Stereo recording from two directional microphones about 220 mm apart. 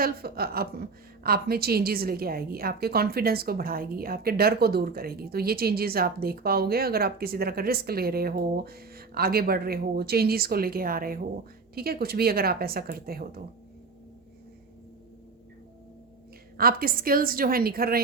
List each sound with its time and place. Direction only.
0.0 s a woman's voice: 45° right (ahead or behind)
16.6 s a woman's voice: 40° right (ahead or behind)